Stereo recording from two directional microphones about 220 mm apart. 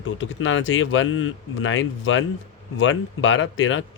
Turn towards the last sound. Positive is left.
turn(degrees=60)  # may be behind; listen again after turning